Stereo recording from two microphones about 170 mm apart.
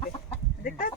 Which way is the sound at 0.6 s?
55° left (ahead or behind).